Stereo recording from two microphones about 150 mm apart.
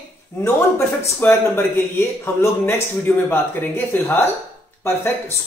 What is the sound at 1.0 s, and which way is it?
Speech, 15° left (ahead or behind).